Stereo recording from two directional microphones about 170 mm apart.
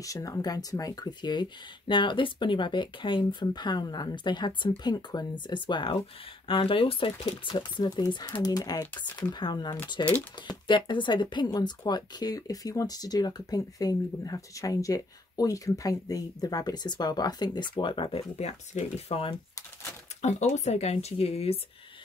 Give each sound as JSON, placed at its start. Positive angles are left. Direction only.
{"t": 0.0, "sound": "speech", "side_deg": 20}
{"t": 18.3, "sound": "speech", "side_deg": 40}